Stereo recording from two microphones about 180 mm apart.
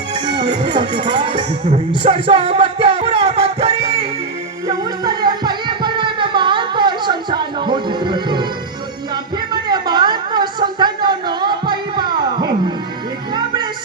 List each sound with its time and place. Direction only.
0.1 s music: 25° right (ahead or behind)
4.7 s music: 20° right (ahead or behind)
9.5 s a sound: 25° right (ahead or behind)
13.3 s music: 25° right (ahead or behind)